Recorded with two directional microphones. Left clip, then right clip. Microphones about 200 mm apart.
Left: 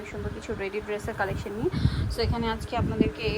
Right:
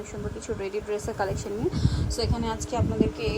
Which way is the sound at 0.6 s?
15° right (ahead or behind).